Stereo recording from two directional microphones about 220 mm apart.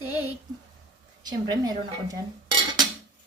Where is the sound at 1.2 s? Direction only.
20° right (ahead or behind).